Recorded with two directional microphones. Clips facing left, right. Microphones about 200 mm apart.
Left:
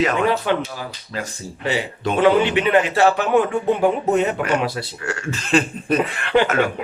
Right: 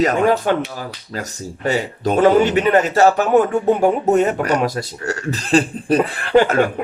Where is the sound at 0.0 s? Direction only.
40° right (ahead or behind).